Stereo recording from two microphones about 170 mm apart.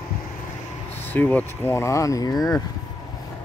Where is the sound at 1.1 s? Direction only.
10° left (ahead or behind).